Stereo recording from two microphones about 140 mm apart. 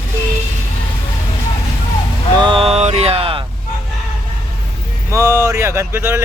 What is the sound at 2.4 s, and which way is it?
Mantra, 40° right (ahead or behind).